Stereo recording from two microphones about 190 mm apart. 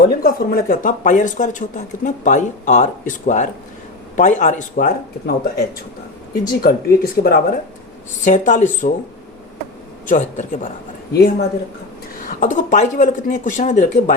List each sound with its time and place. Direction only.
0.1 s speech: 55° left (ahead or behind)
8.2 s speech: 40° left (ahead or behind)
10.1 s speech: 40° left (ahead or behind)
11.1 s speech: 55° left (ahead or behind)
12.2 s speech: 45° left (ahead or behind)